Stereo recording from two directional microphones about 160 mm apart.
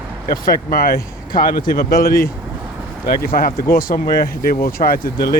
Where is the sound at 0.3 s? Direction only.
65° left (ahead or behind).